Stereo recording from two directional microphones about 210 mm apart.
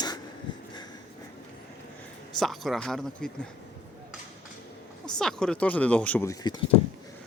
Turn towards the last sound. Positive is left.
turn(degrees=15)  # may be behind; listen again after turning